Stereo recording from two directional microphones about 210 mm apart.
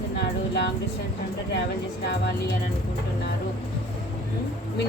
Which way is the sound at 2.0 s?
55° left (ahead or behind).